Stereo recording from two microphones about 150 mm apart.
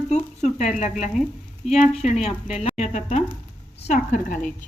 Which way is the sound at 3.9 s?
60° left (ahead or behind).